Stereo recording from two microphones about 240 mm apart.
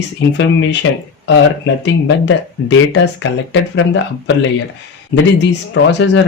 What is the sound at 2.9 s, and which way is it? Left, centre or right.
Speech, left.